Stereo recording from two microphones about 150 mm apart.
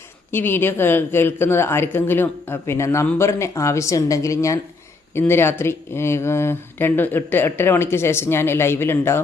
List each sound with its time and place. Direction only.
0.3 s speech: 15° left (ahead or behind)